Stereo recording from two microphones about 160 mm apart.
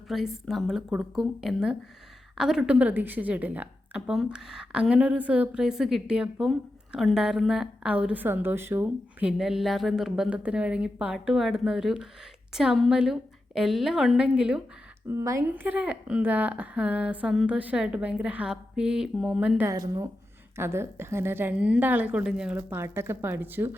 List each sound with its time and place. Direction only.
0.1 s a woman's voice: centre (ahead or behind)
15.1 s a woman's voice: 20° right (ahead or behind)
19.6 s a woman's voice: 20° right (ahead or behind)